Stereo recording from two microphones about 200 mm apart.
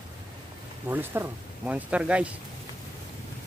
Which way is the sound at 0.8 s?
10° right (ahead or behind).